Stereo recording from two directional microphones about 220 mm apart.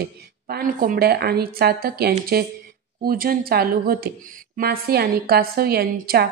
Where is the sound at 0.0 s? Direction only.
45° right (ahead or behind).